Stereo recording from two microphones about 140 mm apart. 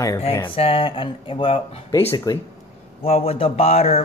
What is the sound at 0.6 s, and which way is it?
Speech, 40° left (ahead or behind).